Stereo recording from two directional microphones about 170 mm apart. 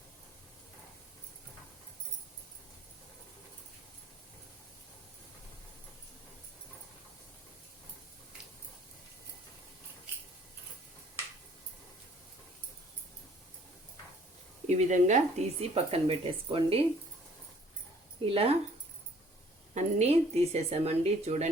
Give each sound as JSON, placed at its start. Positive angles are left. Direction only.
{"t": 14.7, "sound": "speech", "side_deg": -45}
{"t": 18.3, "sound": "speech", "side_deg": -35}
{"t": 19.7, "sound": "speech", "side_deg": -40}